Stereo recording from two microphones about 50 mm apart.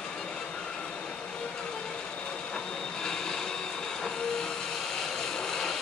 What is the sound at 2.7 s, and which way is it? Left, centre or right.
Vehicle, centre.